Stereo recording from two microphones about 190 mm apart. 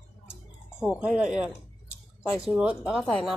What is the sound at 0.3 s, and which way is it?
Music, 5° right (ahead or behind).